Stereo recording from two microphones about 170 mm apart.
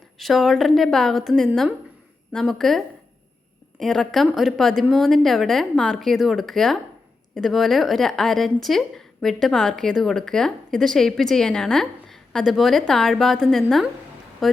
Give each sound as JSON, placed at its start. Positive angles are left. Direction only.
{"t": 0.2, "sound": "a woman's voice", "side_deg": 0}